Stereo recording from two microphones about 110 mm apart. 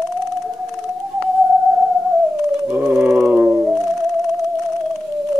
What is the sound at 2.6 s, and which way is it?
Theremin, 10° right (ahead or behind).